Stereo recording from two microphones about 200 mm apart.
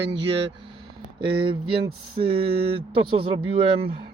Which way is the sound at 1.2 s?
25° right (ahead or behind).